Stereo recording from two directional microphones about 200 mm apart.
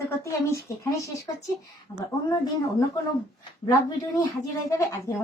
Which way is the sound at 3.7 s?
20° left (ahead or behind).